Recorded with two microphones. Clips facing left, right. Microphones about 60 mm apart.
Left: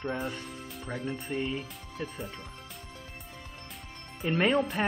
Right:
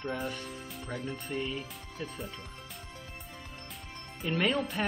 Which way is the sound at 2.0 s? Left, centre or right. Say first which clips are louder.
Left 2 dB; centre.